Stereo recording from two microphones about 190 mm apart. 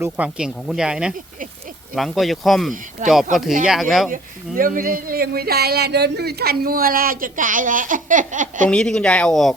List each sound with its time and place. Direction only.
0.0 s speech: 5° right (ahead or behind)
3.0 s speech: 40° right (ahead or behind)
3.7 s speech: centre (ahead or behind)
4.1 s speech: 45° right (ahead or behind)
8.7 s speech: 5° left (ahead or behind)